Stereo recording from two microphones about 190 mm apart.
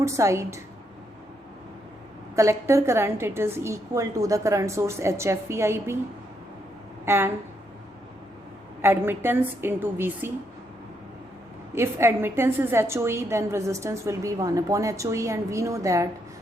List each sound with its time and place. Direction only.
0.0 s a woman's voice: 15° right (ahead or behind)
2.3 s a woman's voice: 15° right (ahead or behind)
7.0 s a woman's voice: 10° right (ahead or behind)
8.8 s a woman's voice: 10° right (ahead or behind)
11.7 s a woman's voice: 15° right (ahead or behind)